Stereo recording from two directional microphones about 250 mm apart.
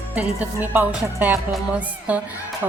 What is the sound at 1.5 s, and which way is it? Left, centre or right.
Speech, centre.